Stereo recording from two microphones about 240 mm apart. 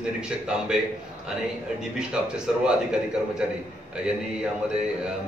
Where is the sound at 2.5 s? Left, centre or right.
Centre.